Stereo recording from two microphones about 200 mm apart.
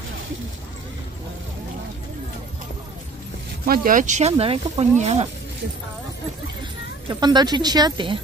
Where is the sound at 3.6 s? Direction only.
45° right (ahead or behind).